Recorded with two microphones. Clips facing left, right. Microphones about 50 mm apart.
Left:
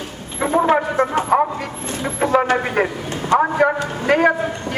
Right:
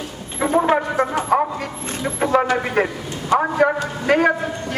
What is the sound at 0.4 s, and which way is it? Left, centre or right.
Speech, centre.